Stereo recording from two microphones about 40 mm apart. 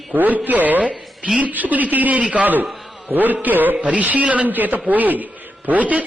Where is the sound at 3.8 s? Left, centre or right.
Right.